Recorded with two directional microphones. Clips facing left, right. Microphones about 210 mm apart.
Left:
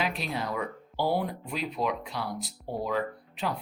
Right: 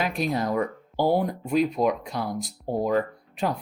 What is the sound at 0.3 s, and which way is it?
Speech, 45° right (ahead or behind).